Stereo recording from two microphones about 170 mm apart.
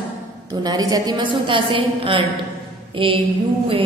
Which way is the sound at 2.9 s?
30° right (ahead or behind).